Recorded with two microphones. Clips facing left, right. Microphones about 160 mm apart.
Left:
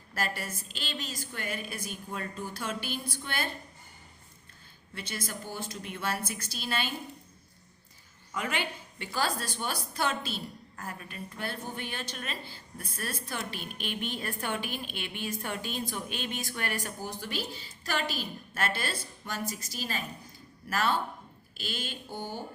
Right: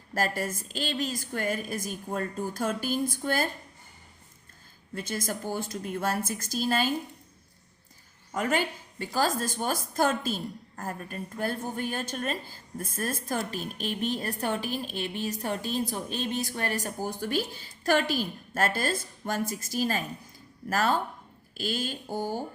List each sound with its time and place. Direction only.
0.1 s a woman's voice: 45° right (ahead or behind)
4.9 s a woman's voice: 45° right (ahead or behind)
8.3 s a woman's voice: 45° right (ahead or behind)